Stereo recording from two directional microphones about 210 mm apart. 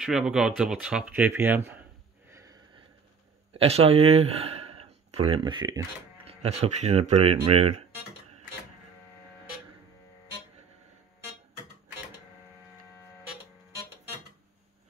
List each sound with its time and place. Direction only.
0.0 s speech: 5° right (ahead or behind)
2.3 s sniff: 15° right (ahead or behind)
3.5 s speech: 30° right (ahead or behind)
6.4 s speech: 30° right (ahead or behind)